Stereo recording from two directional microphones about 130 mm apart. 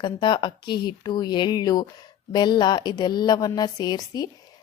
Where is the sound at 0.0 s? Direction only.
35° left (ahead or behind).